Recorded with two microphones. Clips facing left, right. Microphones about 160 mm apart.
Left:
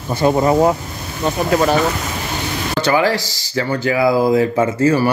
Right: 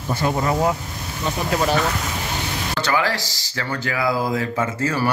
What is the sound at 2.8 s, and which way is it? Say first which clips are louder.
Speech: left 7 dB; 10° left (ahead or behind).